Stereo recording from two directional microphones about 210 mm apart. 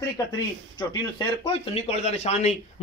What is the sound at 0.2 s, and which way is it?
Speech, 15° left (ahead or behind).